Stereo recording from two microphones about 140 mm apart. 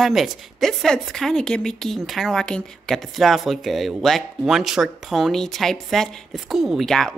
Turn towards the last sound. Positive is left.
turn(degrees=5)  # may be behind; listen again after turning